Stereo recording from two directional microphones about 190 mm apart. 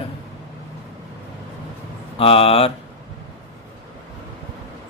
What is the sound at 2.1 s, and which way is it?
Speech, 30° left (ahead or behind).